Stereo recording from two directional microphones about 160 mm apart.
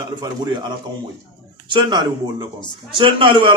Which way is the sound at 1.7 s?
30° right (ahead or behind).